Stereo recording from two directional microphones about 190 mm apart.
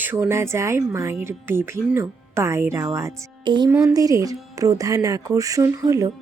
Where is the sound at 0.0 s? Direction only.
10° right (ahead or behind).